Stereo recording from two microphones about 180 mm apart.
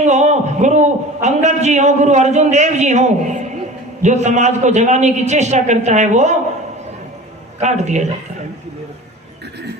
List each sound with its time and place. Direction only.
0.0 s a man's voice: 40° right (ahead or behind)
7.6 s a man's voice: 40° right (ahead or behind)